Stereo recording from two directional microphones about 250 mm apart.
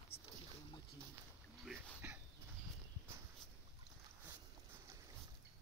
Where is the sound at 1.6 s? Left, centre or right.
Centre.